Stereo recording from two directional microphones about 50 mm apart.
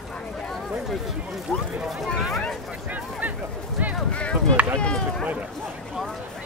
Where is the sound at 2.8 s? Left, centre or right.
Right.